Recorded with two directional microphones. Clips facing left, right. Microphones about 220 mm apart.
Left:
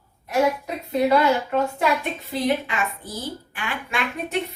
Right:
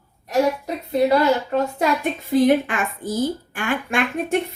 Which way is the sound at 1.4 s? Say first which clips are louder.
Right 1 dB; 35° right (ahead or behind).